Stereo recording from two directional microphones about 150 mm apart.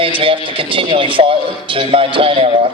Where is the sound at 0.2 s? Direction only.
35° right (ahead or behind).